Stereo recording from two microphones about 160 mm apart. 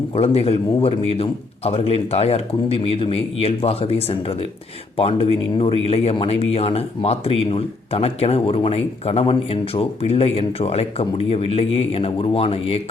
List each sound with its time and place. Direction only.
0.1 s speech: 40° left (ahead or behind)